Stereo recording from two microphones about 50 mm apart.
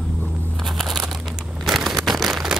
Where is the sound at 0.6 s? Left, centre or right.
Centre.